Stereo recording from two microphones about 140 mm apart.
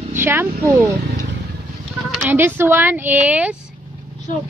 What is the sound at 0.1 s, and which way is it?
Speech, 15° right (ahead or behind).